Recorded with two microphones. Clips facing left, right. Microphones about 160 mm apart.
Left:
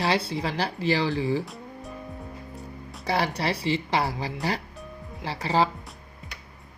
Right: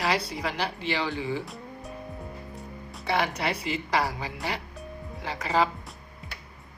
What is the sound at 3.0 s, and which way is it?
Speech, 35° left (ahead or behind).